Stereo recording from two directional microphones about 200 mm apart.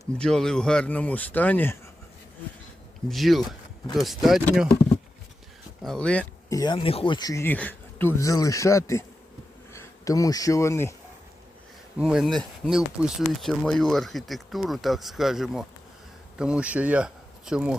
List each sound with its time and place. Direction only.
0.0 s speech: centre (ahead or behind)
3.1 s speech: centre (ahead or behind)
5.8 s speech: 5° left (ahead or behind)
6.5 s speech: 20° left (ahead or behind)
11.9 s speech: 5° right (ahead or behind)